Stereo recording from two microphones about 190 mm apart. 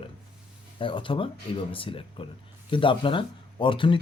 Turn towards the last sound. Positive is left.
turn(degrees=25)  # may be behind; listen again after turning